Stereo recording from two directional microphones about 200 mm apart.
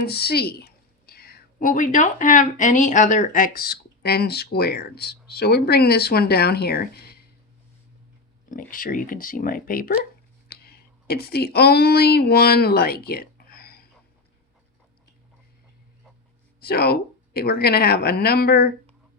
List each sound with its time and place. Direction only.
0.0 s a woman's voice: 50° left (ahead or behind)
8.4 s speech: 45° left (ahead or behind)
16.6 s speech: 50° left (ahead or behind)